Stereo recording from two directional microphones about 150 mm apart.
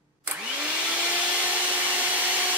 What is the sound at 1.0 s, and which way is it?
Vacuum cleaner, 10° right (ahead or behind).